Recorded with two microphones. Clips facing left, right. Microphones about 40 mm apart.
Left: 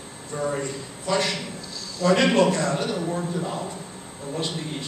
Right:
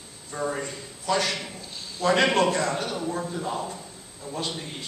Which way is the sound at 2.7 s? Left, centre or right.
Centre.